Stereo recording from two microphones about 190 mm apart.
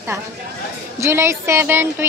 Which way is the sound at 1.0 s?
15° right (ahead or behind).